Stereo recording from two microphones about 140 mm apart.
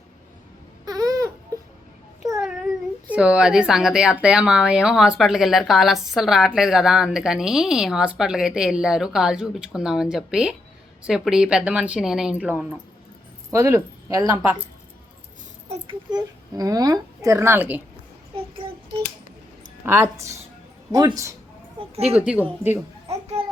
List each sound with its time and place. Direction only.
0.9 s crying: 25° right (ahead or behind)
3.1 s speech: 10° right (ahead or behind)
13.5 s speech: 20° right (ahead or behind)
16.0 s a child's voice: 30° right (ahead or behind)
19.8 s a child's voice: 15° right (ahead or behind)
21.8 s speech: 45° right (ahead or behind)
22.2 s speech: 10° right (ahead or behind)